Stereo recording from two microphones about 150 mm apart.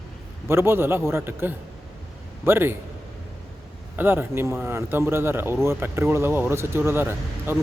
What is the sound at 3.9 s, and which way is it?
Speech, 15° right (ahead or behind).